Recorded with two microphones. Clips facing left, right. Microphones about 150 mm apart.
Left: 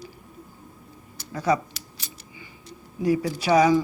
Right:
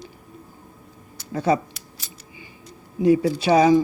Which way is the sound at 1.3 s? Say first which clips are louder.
Right 3 dB; 25° right (ahead or behind).